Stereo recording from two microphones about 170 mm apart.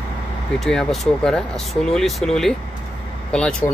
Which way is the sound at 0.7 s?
5° left (ahead or behind).